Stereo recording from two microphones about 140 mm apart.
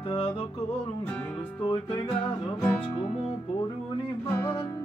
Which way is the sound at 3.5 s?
35° left (ahead or behind).